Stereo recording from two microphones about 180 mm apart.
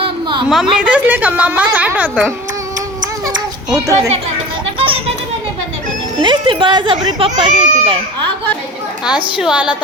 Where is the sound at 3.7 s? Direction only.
20° right (ahead or behind).